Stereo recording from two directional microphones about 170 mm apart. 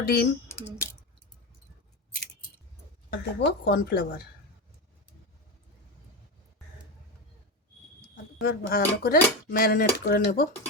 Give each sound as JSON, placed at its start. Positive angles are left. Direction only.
{"t": 0.0, "sound": "speech", "side_deg": 70}
{"t": 3.1, "sound": "speech", "side_deg": 80}
{"t": 8.1, "sound": "speech", "side_deg": 60}